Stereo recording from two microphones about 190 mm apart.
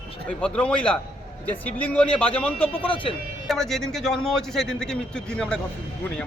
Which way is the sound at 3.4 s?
Centre (ahead or behind).